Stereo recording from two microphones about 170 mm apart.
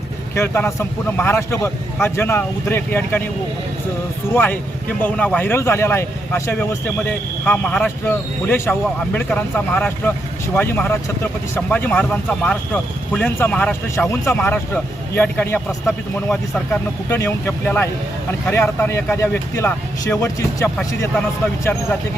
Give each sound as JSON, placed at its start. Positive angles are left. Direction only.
{"t": 0.3, "sound": "speech", "side_deg": 15}
{"t": 4.3, "sound": "speech", "side_deg": 15}
{"t": 17.1, "sound": "speech", "side_deg": 15}